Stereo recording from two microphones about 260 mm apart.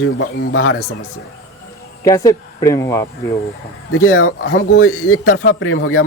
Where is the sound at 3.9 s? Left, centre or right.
Left.